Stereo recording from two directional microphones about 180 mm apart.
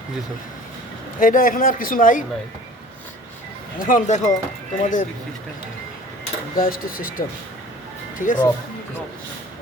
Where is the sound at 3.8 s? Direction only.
45° left (ahead or behind).